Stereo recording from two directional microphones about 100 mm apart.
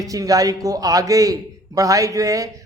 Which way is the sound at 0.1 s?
35° right (ahead or behind).